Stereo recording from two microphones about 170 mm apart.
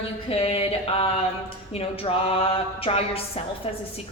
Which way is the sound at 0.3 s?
35° left (ahead or behind).